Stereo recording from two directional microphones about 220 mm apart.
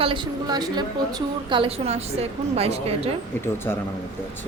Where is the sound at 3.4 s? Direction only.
10° left (ahead or behind).